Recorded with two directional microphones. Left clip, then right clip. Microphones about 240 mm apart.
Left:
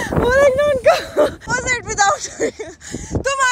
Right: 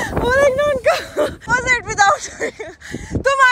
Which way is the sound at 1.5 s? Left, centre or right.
Centre.